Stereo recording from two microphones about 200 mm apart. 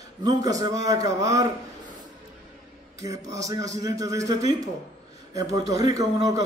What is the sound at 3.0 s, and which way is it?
A man's voice, 15° right (ahead or behind).